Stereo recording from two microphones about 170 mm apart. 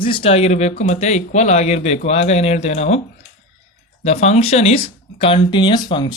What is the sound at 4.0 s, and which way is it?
Speech, 40° left (ahead or behind).